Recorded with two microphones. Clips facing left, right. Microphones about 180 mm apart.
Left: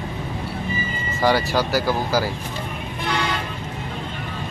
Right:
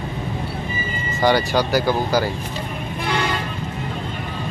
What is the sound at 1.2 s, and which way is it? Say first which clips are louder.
Speech: right 2 dB; centre (ahead or behind).